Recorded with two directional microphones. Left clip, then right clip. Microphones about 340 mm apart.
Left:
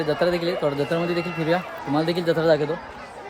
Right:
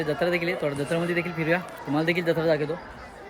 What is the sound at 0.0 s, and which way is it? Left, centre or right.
Speech, centre.